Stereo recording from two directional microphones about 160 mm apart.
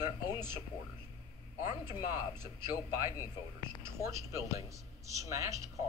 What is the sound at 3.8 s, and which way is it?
A man's voice, 15° right (ahead or behind).